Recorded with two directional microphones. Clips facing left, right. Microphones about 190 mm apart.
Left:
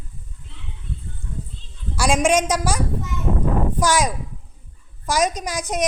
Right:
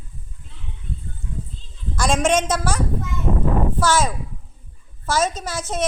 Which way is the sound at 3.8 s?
15° left (ahead or behind).